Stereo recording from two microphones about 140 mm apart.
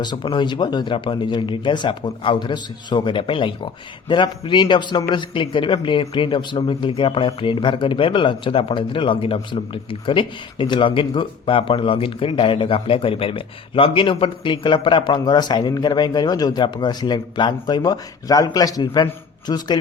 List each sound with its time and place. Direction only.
0.0 s a man's voice: 35° left (ahead or behind)